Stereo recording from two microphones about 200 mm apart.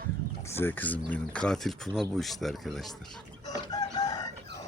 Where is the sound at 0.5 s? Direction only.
10° left (ahead or behind).